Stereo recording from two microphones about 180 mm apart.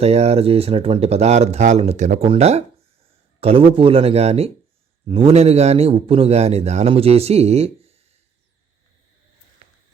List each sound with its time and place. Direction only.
0.0 s a man's voice: 35° right (ahead or behind)